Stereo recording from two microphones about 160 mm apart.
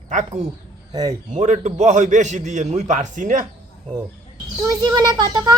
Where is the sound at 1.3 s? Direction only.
50° right (ahead or behind).